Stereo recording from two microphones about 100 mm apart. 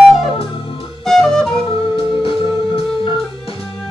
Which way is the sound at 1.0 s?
5° left (ahead or behind).